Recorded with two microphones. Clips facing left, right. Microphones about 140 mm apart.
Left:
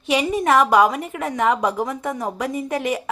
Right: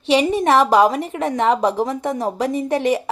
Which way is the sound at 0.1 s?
30° right (ahead or behind).